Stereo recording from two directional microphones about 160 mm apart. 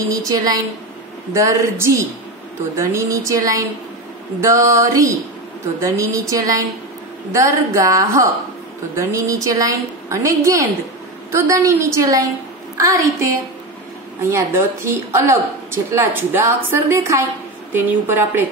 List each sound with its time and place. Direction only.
0.1 s a woman's voice: 20° right (ahead or behind)